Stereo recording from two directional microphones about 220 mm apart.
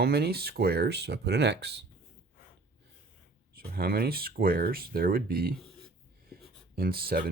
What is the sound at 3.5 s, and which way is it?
Speech, 45° right (ahead or behind).